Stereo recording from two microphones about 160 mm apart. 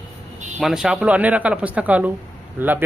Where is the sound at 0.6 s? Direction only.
5° right (ahead or behind).